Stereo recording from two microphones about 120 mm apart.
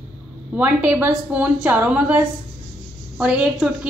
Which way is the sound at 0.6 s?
15° right (ahead or behind).